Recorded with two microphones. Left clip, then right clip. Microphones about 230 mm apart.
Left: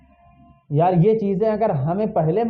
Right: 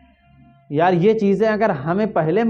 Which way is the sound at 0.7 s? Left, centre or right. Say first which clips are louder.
Right 2 dB; right.